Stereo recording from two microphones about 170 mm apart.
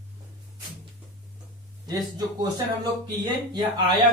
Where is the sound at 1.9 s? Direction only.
25° right (ahead or behind).